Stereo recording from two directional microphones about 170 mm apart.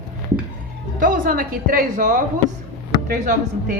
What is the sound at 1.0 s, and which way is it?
A woman's voice, 55° right (ahead or behind).